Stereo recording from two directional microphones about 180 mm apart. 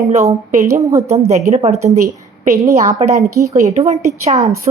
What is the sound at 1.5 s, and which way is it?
A woman's voice, 40° right (ahead or behind).